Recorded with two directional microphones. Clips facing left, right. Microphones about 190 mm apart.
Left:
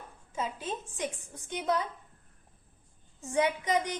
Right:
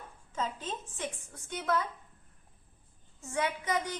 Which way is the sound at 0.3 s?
10° left (ahead or behind).